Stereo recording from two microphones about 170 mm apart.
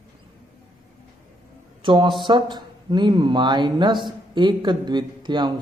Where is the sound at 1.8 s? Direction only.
30° right (ahead or behind).